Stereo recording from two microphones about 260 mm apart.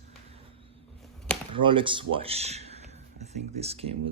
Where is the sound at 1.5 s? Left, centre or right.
Centre.